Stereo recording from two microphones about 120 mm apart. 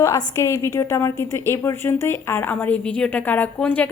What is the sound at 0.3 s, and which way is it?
A woman's voice, 25° left (ahead or behind).